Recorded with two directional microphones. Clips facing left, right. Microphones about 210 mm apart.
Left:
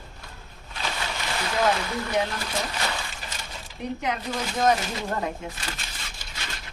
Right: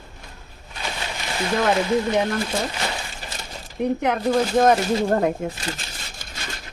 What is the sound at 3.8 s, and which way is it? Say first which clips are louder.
Speech: right 8 dB; 55° right (ahead or behind).